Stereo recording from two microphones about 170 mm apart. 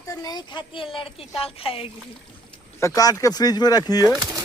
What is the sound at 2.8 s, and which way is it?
Speech, 20° left (ahead or behind).